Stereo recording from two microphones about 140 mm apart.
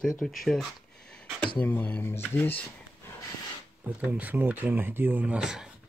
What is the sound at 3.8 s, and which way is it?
Speech, 10° right (ahead or behind).